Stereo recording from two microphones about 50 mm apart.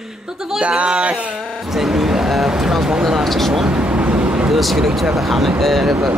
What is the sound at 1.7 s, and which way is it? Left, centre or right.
Speech, centre.